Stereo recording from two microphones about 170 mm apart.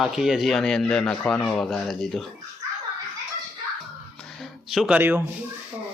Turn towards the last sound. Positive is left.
turn(degrees=-10)  # may be behind; listen again after turning